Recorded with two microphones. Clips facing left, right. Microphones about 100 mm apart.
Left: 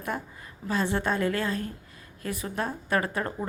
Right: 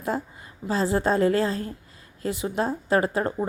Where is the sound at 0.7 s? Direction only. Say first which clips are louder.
Right 4 dB; 30° right (ahead or behind).